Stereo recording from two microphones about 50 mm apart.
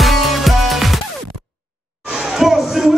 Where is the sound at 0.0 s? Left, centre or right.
Centre.